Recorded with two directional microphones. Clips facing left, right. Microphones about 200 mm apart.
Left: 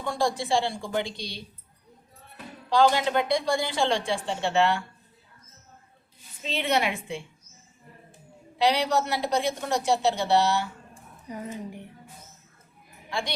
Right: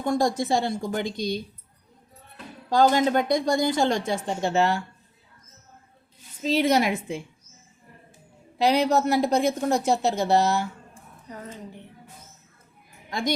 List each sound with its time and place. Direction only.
0.0 s a woman's voice: 45° right (ahead or behind)
2.6 s a woman's voice: 45° right (ahead or behind)
6.4 s a woman's voice: 40° right (ahead or behind)
8.5 s a woman's voice: 45° right (ahead or behind)
11.3 s speech: 10° left (ahead or behind)
13.1 s a woman's voice: 40° right (ahead or behind)